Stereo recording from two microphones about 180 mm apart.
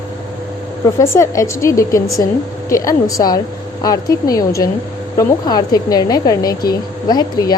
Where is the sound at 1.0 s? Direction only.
15° left (ahead or behind).